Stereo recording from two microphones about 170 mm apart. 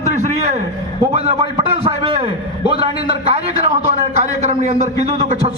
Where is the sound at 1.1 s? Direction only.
35° right (ahead or behind).